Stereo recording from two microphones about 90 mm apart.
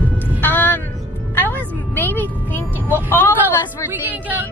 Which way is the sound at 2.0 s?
20° left (ahead or behind).